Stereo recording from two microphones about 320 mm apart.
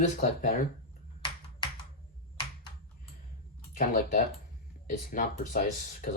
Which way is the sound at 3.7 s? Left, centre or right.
Left.